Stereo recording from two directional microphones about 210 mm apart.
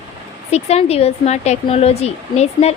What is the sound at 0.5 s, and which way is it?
Speech, 30° left (ahead or behind).